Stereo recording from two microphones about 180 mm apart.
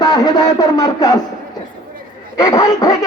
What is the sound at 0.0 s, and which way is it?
Speech, 20° left (ahead or behind).